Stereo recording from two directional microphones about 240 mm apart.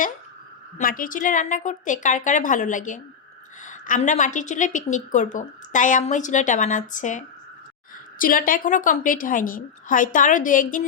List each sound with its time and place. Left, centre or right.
0.8 s a woman's voice: left